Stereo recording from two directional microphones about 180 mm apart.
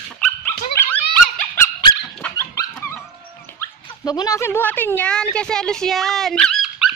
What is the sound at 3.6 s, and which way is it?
Speech, 20° left (ahead or behind).